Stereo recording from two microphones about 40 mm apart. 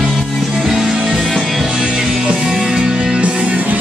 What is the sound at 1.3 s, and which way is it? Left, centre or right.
Music, centre.